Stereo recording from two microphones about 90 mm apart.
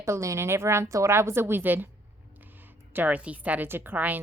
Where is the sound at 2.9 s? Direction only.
15° right (ahead or behind).